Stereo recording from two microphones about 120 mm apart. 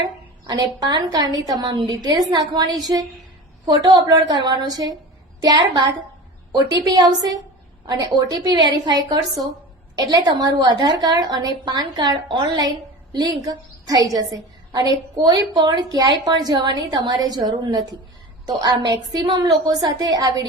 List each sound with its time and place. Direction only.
0.0 s a woman's voice: 40° right (ahead or behind)